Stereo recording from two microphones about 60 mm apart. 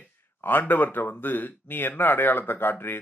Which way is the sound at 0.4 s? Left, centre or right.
Left.